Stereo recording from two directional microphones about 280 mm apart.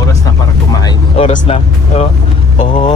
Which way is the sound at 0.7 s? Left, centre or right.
Left.